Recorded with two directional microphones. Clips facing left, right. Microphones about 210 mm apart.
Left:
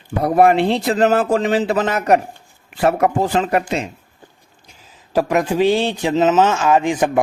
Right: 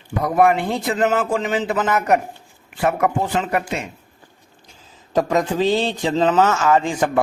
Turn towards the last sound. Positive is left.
turn(degrees=15)  # may be behind; listen again after turning